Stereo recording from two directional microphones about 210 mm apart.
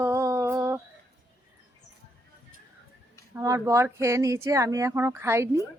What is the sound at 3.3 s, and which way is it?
Speech, 15° right (ahead or behind).